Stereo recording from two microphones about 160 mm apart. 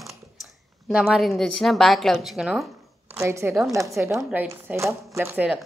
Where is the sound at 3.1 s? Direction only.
15° right (ahead or behind).